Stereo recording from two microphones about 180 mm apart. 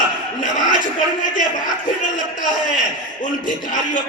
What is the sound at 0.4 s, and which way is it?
A man's voice, 45° left (ahead or behind).